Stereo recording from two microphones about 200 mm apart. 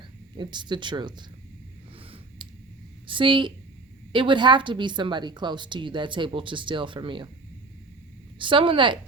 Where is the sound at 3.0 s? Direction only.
25° right (ahead or behind).